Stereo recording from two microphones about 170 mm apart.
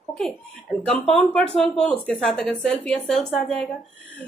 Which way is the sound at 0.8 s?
5° left (ahead or behind).